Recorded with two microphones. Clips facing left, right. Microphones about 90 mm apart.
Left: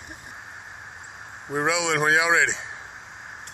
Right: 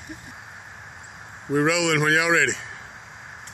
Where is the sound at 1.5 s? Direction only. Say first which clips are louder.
Right 3 dB; 20° left (ahead or behind).